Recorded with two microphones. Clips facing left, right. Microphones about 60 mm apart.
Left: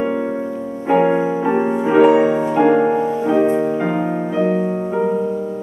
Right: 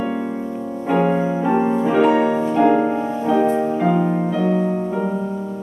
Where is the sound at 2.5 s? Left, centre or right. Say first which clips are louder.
Left 2 dB; left.